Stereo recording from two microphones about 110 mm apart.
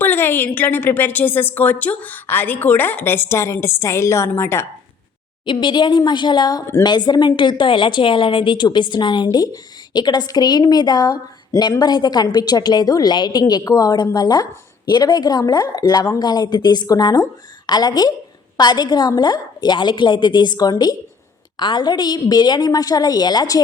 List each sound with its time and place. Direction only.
0.0 s a woman's voice: 20° left (ahead or behind)
5.5 s a woman's voice: 45° left (ahead or behind)